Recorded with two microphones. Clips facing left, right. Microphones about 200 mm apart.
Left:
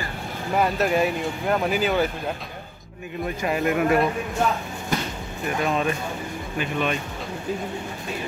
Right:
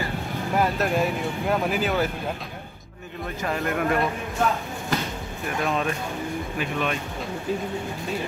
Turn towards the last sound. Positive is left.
turn(degrees=0)  # may be behind; listen again after turning